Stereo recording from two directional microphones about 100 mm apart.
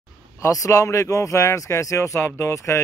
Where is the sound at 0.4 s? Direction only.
35° left (ahead or behind).